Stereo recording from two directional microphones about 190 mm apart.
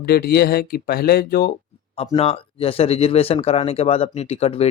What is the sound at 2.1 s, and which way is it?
Speech, 30° left (ahead or behind).